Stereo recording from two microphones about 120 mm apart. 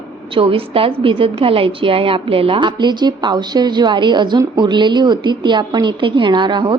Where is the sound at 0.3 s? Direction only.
50° right (ahead or behind).